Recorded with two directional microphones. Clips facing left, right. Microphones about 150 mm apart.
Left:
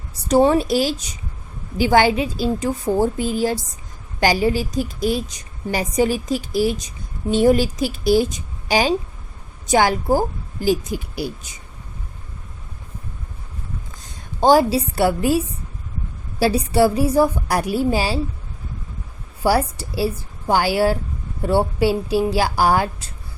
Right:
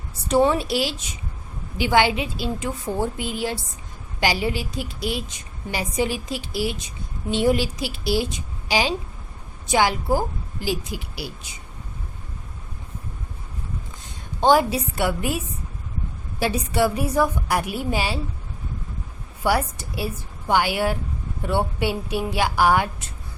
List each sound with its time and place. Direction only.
0.3 s a woman's voice: 40° left (ahead or behind)
14.4 s a woman's voice: 35° left (ahead or behind)
16.4 s a woman's voice: 35° left (ahead or behind)
19.4 s a woman's voice: 35° left (ahead or behind)